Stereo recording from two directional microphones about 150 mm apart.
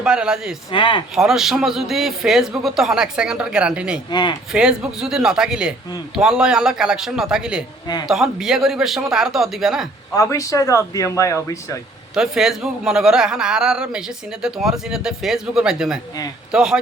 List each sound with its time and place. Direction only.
0.0 s a man's voice: 5° right (ahead or behind)
0.7 s speech: 35° left (ahead or behind)
1.1 s a man's voice: 5° right (ahead or behind)
4.1 s speech: 30° left (ahead or behind)
4.5 s a man's voice: 5° right (ahead or behind)
10.2 s speech: 20° left (ahead or behind)
12.1 s a man's voice: centre (ahead or behind)